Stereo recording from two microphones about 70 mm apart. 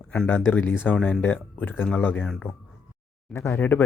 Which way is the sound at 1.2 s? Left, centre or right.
Left.